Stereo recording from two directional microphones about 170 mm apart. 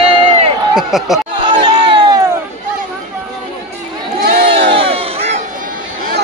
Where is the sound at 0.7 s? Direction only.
Centre (ahead or behind).